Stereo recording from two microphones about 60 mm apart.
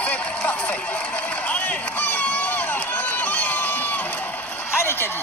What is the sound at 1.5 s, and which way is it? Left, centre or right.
Run, left.